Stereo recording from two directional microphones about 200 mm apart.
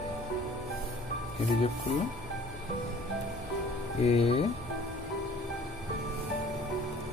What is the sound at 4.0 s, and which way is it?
Speech, 30° left (ahead or behind).